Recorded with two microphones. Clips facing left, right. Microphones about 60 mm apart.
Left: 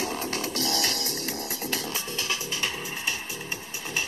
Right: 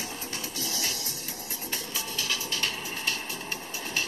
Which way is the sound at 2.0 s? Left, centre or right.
Left.